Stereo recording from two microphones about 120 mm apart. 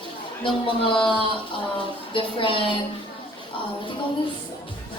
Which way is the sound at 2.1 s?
45° left (ahead or behind).